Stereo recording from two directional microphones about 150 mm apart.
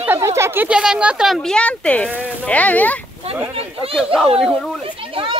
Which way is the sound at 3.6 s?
40° right (ahead or behind).